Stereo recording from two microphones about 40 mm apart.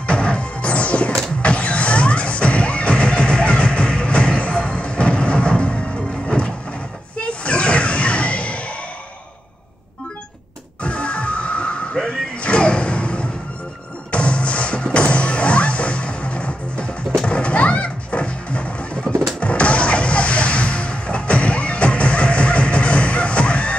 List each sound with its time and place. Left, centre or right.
0.0 s music: left
6.2 s a sound: left
10.8 s music: left